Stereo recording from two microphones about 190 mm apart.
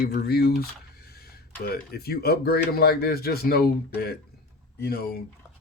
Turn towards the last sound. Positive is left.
turn(degrees=55)  # may be behind; listen again after turning